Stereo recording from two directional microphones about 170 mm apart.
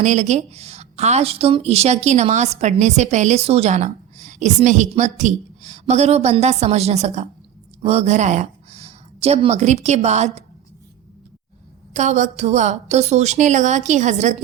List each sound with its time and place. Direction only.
0.0 s a woman's voice: 45° right (ahead or behind)
11.9 s a woman's voice: 45° right (ahead or behind)